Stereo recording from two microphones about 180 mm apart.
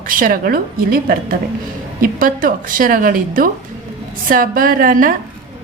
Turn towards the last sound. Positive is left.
turn(degrees=-50)  # may be behind; listen again after turning